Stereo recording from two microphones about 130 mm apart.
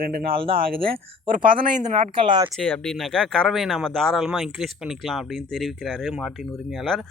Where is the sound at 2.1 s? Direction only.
35° right (ahead or behind).